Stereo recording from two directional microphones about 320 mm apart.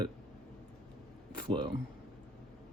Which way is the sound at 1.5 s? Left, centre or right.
Centre.